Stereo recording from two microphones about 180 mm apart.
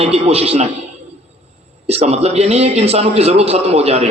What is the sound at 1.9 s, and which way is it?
A man's voice, 35° right (ahead or behind).